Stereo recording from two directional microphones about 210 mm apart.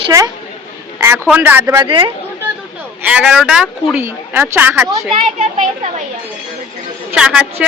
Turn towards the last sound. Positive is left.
turn(degrees=-5)  # may be behind; listen again after turning